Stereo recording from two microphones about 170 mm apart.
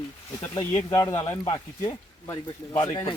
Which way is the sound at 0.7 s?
15° left (ahead or behind).